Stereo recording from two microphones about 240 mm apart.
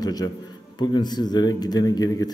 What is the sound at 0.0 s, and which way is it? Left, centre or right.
A man's voice, centre.